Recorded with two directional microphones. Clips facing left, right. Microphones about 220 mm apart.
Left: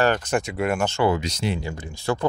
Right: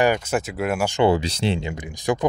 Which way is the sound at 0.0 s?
10° right (ahead or behind).